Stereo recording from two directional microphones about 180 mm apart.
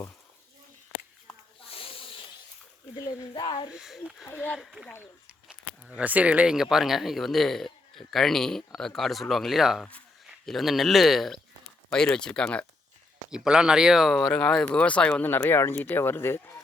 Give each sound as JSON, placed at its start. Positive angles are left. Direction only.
{"t": 1.7, "sound": "snake", "side_deg": 30}
{"t": 2.9, "sound": "speech", "side_deg": 25}
{"t": 3.7, "sound": "speech", "side_deg": 0}
{"t": 6.0, "sound": "speech", "side_deg": -10}